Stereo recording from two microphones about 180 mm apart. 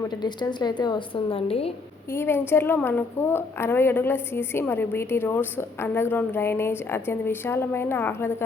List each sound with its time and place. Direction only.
0.1 s a woman's voice: 25° left (ahead or behind)
2.1 s a woman's voice: 10° left (ahead or behind)